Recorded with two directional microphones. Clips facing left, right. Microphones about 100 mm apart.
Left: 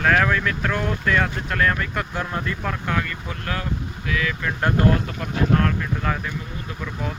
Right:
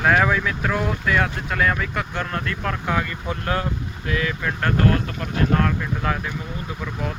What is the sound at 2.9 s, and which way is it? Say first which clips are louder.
Speech: right 2 dB; 15° right (ahead or behind).